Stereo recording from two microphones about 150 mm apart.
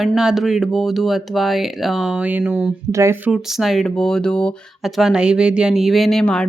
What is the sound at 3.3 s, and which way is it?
Speech, 5° right (ahead or behind).